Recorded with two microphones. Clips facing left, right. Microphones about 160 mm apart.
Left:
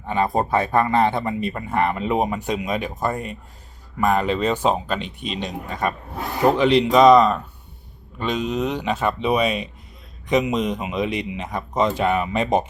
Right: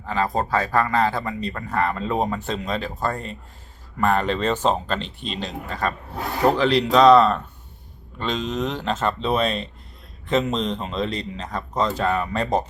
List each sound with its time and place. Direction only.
0.0 s speech: 20° left (ahead or behind)
6.1 s speech: centre (ahead or behind)
7.1 s speech: 15° left (ahead or behind)